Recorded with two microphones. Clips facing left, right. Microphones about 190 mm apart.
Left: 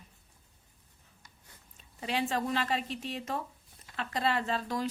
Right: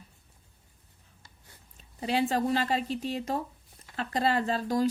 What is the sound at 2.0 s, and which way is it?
A woman's voice, 35° right (ahead or behind).